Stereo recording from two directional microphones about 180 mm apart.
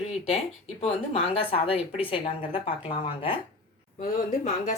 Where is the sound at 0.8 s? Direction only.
30° left (ahead or behind).